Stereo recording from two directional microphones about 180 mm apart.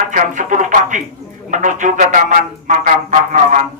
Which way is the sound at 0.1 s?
45° right (ahead or behind).